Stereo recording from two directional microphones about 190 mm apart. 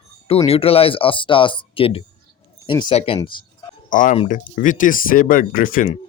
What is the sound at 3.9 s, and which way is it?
Speech, 45° left (ahead or behind).